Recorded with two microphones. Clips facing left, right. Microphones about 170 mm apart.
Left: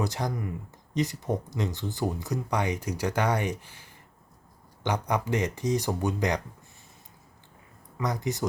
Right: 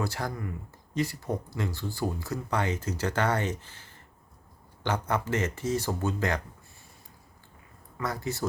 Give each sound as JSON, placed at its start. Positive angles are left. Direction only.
{"t": 0.0, "sound": "speech", "side_deg": 20}
{"t": 7.9, "sound": "speech", "side_deg": 20}